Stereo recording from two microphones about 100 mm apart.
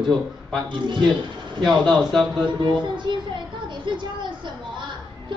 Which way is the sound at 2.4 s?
50° right (ahead or behind).